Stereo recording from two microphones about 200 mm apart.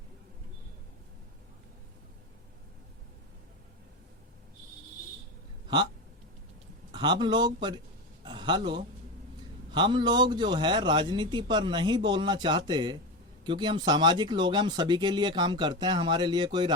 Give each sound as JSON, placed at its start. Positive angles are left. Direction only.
{"t": 5.7, "sound": "speech", "side_deg": -20}
{"t": 6.9, "sound": "speech", "side_deg": -20}
{"t": 8.2, "sound": "a sound", "side_deg": -25}
{"t": 9.7, "sound": "speech", "side_deg": -25}